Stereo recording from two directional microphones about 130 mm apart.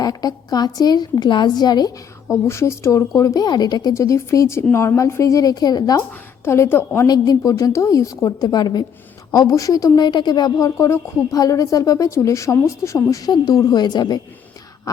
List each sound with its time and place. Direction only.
0.0 s a woman's voice: 30° left (ahead or behind)
2.3 s a woman's voice: 20° left (ahead or behind)
6.4 s a woman's voice: 20° left (ahead or behind)
7.1 s a woman's voice: 30° left (ahead or behind)
14.9 s a sound: 25° left (ahead or behind)